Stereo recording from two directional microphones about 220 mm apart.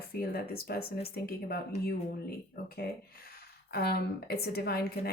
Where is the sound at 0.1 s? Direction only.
45° left (ahead or behind).